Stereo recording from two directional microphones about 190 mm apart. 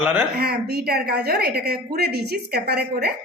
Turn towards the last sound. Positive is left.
turn(degrees=-55)  # may be behind; listen again after turning